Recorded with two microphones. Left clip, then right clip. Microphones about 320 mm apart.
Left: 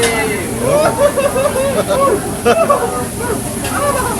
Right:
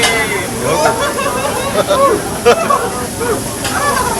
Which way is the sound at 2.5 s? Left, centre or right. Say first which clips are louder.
Right 2 dB; centre.